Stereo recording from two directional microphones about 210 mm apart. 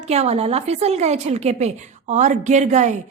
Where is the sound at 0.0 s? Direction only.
30° right (ahead or behind).